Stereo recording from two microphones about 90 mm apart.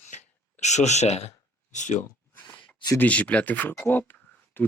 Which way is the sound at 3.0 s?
15° left (ahead or behind).